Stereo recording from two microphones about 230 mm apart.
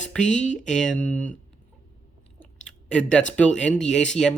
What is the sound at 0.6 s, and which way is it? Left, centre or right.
Speech, centre.